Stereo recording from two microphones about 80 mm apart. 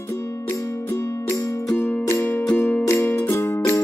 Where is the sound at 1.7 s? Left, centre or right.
Centre.